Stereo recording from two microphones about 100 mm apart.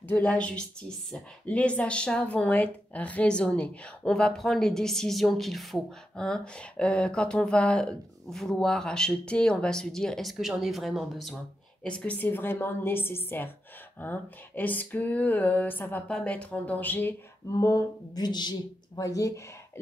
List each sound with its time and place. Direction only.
0.1 s speech: 15° left (ahead or behind); by 11.1 s centre (ahead or behind)
11.8 s a woman's voice: 10° left (ahead or behind)
17.6 s speech: 30° left (ahead or behind)